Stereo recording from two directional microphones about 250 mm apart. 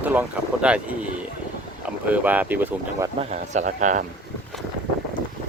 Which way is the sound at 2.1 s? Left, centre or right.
Centre.